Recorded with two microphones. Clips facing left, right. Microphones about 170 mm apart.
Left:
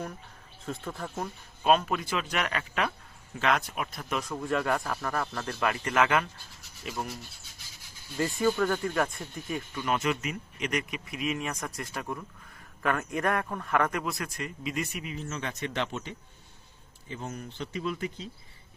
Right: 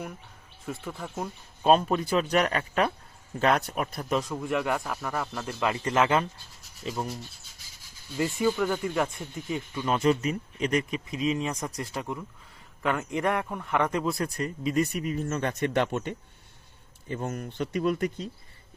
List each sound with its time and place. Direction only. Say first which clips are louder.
0.6 s speech: even; 10° right (ahead or behind)
1.6 s speech: right 3 dB; 30° right (ahead or behind)
4.4 s speech: even; 15° right (ahead or behind); by 7.0 s 30° right (ahead or behind)
8.2 s speech: right 1 dB; 10° right (ahead or behind)
9.8 s speech: right 6 dB; 30° right (ahead or behind)
14.0 s speech: right 6 dB; 35° right (ahead or behind); by 18.3 s 50° right (ahead or behind)